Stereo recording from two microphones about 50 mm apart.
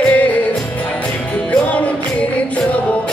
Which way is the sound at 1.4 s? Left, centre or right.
Left.